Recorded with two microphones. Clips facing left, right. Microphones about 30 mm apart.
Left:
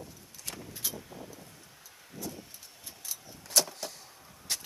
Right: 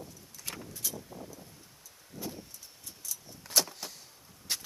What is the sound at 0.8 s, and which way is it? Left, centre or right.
Vehicle, left.